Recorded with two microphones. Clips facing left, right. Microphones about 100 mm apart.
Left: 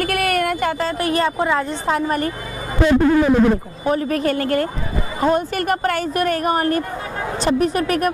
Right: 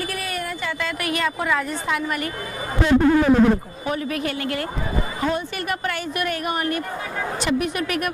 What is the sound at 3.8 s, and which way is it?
A woman's voice, 40° left (ahead or behind).